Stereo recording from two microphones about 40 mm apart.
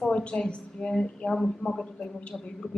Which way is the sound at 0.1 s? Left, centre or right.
Left.